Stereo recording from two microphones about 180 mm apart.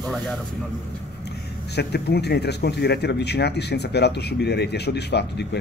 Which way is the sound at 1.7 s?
65° left (ahead or behind).